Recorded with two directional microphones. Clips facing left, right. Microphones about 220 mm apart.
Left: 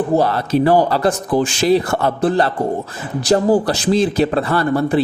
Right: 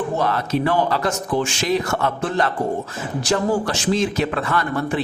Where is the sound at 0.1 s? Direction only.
35° left (ahead or behind).